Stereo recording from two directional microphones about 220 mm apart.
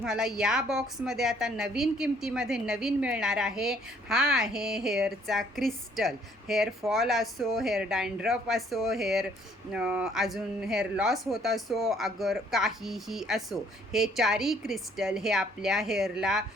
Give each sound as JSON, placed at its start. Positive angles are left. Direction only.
{"t": 0.0, "sound": "a woman's voice", "side_deg": 0}